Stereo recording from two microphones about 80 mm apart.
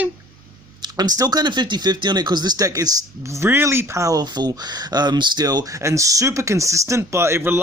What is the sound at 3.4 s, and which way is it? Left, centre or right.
Speech, right.